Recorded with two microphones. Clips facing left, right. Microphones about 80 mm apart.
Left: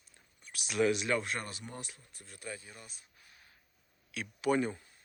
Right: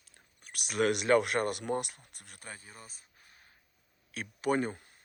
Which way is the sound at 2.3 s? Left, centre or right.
Right.